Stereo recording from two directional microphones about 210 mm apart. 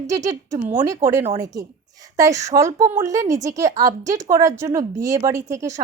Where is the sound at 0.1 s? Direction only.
15° right (ahead or behind).